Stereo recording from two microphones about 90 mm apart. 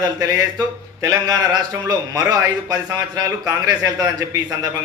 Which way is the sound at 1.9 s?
45° right (ahead or behind).